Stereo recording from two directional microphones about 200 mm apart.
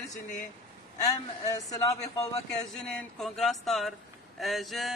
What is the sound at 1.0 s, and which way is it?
Speech, 20° left (ahead or behind).